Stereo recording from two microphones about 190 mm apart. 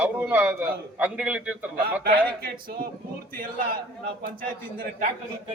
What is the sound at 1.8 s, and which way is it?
Speech, 55° right (ahead or behind).